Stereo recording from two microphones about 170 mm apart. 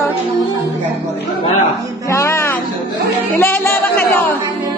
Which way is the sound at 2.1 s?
15° left (ahead or behind).